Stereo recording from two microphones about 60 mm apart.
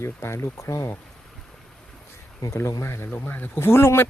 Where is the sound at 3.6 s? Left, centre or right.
Left.